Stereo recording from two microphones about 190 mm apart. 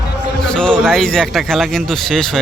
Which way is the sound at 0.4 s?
5° left (ahead or behind).